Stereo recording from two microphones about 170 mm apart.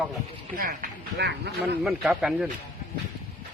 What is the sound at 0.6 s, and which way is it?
Speech, 55° right (ahead or behind).